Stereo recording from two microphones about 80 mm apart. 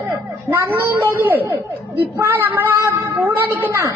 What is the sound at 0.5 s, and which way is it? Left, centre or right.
A woman's voice, right.